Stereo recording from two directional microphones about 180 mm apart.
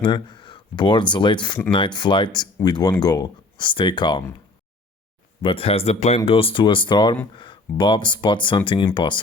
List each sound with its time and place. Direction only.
0.0 s speech: 25° left (ahead or behind)
5.4 s speech: 30° left (ahead or behind)